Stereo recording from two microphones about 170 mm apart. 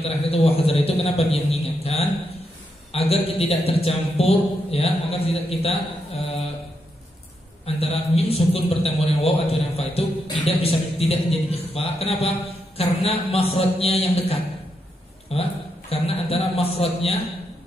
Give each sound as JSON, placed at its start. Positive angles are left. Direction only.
{"t": 0.0, "sound": "a man's voice", "side_deg": 35}
{"t": 7.6, "sound": "a man's voice", "side_deg": 35}